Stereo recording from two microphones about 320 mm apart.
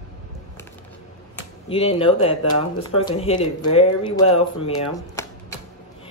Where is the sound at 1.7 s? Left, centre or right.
Centre.